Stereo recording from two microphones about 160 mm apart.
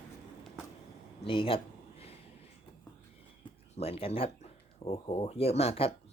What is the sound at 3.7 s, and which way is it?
Speech, 40° left (ahead or behind).